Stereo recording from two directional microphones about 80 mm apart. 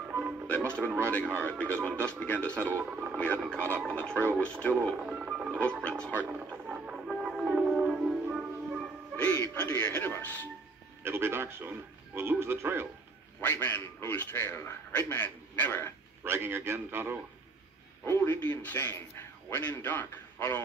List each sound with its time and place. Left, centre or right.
0.1 s music: right
1.4 s a man's voice: centre
2.5 s a man's voice: right
3.8 s speech: centre
4.9 s speech: centre
5.9 s speech: centre
6.2 s music: centre
9.1 s music: left
10.1 s a man's voice: left
11.0 s a man's voice: right
13.4 s a man's voice: left
16.3 s a man's voice: right
18.0 s a sound: left
18.4 s a man's voice: left